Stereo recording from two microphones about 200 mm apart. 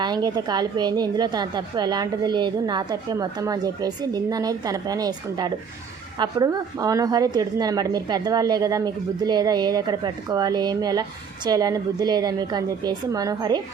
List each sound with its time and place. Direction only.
0.0 s a woman's voice: 20° right (ahead or behind)